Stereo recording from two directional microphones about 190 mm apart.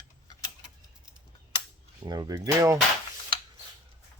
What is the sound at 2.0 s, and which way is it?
Speech, 20° right (ahead or behind).